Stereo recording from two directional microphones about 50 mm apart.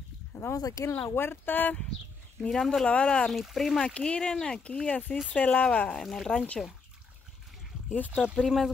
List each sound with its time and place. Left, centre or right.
0.4 s speech: left
0.9 s speech: left
2.5 s speech: centre
2.9 s speech: left
3.3 s speech: centre
3.8 s speech: centre
4.9 s speech: left
5.9 s speech: centre
7.9 s speech: left
8.4 s speech: centre